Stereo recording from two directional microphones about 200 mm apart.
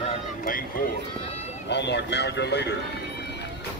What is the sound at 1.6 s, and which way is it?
Speech, 60° left (ahead or behind).